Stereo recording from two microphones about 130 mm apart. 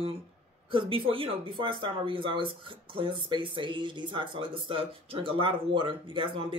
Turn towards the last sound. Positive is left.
turn(degrees=-40)  # may be behind; listen again after turning